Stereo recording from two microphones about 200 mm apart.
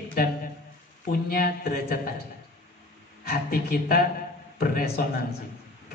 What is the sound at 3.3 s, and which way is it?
Speech, 50° left (ahead or behind).